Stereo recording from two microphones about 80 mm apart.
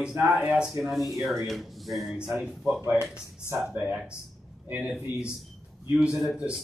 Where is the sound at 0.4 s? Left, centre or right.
Centre.